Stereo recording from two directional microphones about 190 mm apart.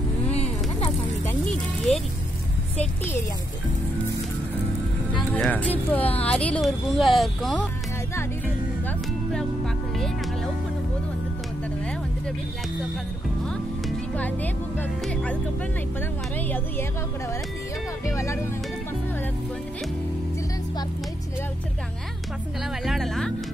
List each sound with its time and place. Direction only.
0.3 s a sound: 35° left (ahead or behind)
5.3 s speech: 10° left (ahead or behind)
9.9 s music: centre (ahead or behind)
13.5 s speech: 5° left (ahead or behind)
16.3 s speech: 10° left (ahead or behind)
18.0 s music: 15° left (ahead or behind)
22.8 s speech: centre (ahead or behind)